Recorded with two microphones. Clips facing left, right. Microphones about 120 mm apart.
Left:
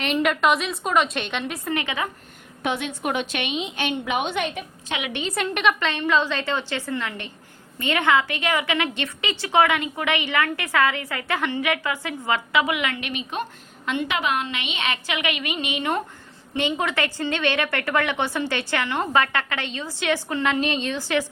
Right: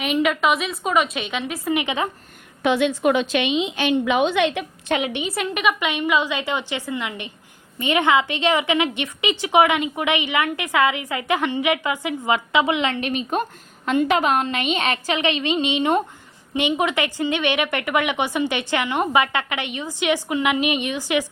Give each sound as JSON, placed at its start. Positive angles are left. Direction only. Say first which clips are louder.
{"t": 0.0, "sound": "a woman's voice", "louder": "right 1 dB", "side_deg": -5}
{"t": 1.7, "sound": "a woman's voice", "louder": "right 4 dB", "side_deg": -15}
{"t": 2.6, "sound": "a woman's voice", "louder": "right 8 dB", "side_deg": -90}
{"t": 5.1, "sound": "a woman's voice", "louder": "right 1 dB", "side_deg": -5}